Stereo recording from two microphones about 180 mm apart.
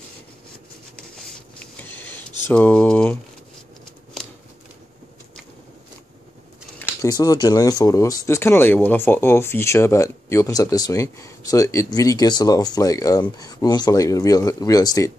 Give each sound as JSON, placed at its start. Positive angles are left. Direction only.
{"t": 1.1, "sound": "a sound", "side_deg": 5}
{"t": 2.4, "sound": "speech", "side_deg": 10}
{"t": 6.8, "sound": "speech", "side_deg": 20}